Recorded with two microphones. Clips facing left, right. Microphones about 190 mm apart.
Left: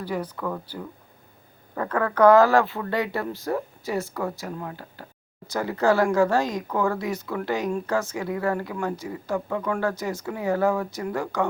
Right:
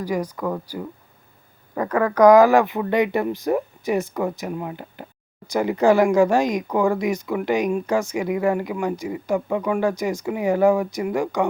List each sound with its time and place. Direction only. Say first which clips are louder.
0.0 s speech: right 4 dB; 10° right (ahead or behind)